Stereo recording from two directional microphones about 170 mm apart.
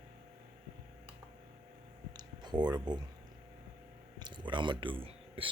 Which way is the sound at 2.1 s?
25° right (ahead or behind).